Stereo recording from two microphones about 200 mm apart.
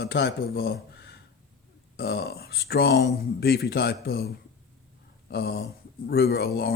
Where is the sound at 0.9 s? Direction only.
50° left (ahead or behind).